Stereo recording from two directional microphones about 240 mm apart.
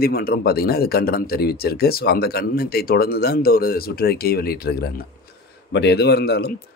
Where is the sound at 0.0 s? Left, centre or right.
Left.